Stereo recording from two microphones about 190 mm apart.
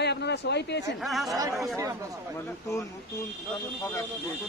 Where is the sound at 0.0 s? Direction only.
60° left (ahead or behind).